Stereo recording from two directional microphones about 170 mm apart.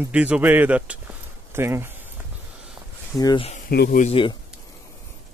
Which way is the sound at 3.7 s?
70° left (ahead or behind).